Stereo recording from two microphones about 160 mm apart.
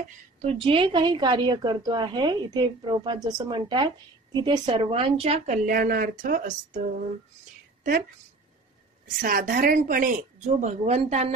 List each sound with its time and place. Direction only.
0.4 s a woman's voice: 40° right (ahead or behind)
5.7 s a woman's voice: 65° right (ahead or behind)
9.0 s a woman's voice: 60° right (ahead or behind); by 11.3 s 45° right (ahead or behind)